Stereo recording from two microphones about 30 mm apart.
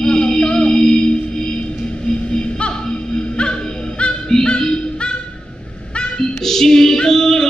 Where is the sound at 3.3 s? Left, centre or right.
Left.